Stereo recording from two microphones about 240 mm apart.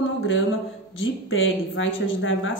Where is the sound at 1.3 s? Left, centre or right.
Left.